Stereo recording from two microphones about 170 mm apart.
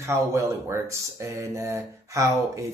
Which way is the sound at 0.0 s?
15° right (ahead or behind).